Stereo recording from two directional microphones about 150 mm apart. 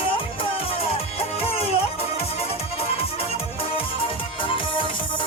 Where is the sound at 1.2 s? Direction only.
40° left (ahead or behind).